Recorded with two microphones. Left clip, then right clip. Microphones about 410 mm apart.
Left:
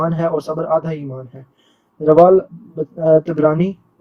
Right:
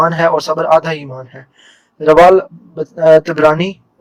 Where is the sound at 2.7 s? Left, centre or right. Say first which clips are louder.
Right 5 dB; right.